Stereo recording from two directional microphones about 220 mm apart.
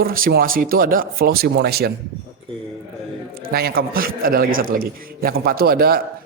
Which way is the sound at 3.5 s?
45° right (ahead or behind).